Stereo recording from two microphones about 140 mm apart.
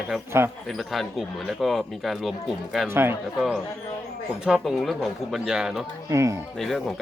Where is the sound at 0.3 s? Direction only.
20° right (ahead or behind).